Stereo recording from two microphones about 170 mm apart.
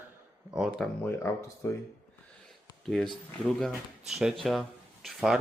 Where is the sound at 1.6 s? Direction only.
15° left (ahead or behind).